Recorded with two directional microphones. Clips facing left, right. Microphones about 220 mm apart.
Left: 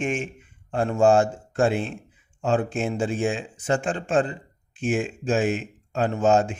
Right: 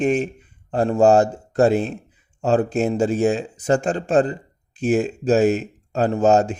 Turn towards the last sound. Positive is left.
turn(degrees=-40)  # may be behind; listen again after turning